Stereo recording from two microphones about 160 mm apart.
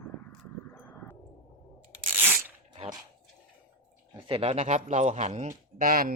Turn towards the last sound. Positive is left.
turn(degrees=-60)  # may be behind; listen again after turning